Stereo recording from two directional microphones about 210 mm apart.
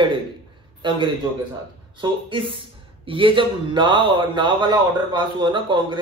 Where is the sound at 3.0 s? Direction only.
25° right (ahead or behind).